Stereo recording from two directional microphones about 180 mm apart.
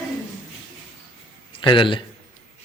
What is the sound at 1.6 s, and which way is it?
Speech, 25° left (ahead or behind).